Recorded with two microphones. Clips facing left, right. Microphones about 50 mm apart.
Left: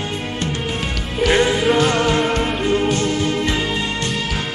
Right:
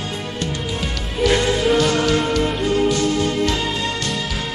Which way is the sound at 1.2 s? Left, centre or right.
Left.